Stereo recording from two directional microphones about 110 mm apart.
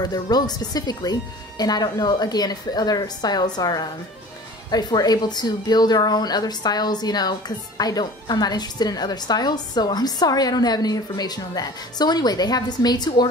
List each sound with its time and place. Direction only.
0.0 s speech: 40° left (ahead or behind)